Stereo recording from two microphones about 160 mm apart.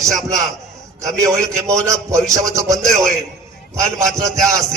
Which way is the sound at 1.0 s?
20° right (ahead or behind).